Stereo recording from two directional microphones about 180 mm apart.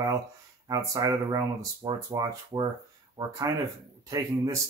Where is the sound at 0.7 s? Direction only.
20° right (ahead or behind).